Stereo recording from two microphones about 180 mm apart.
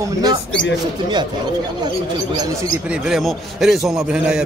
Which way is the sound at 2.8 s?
5° right (ahead or behind).